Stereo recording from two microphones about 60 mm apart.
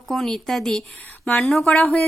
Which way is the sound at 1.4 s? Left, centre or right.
Centre.